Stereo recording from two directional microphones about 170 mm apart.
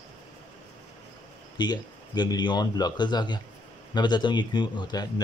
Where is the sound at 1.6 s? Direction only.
25° left (ahead or behind).